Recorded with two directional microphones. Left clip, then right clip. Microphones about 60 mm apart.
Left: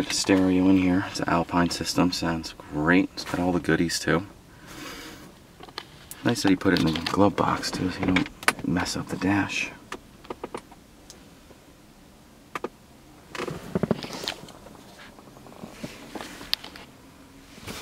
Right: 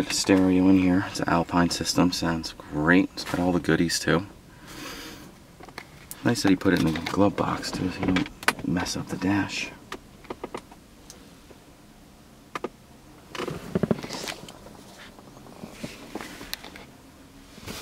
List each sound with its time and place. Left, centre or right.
0.0 s speech: centre
6.3 s speech: centre
6.7 s speech: left
8.0 s power windows: centre
8.7 s speech: left
10.2 s power windows: centre
13.3 s a sound: centre
13.6 s a sound: centre
16.1 s a sound: centre